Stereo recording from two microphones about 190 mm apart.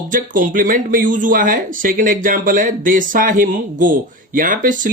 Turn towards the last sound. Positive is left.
turn(degrees=-45)  # may be behind; listen again after turning